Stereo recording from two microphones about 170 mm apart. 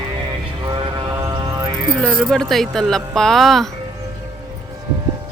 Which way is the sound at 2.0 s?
Centre (ahead or behind).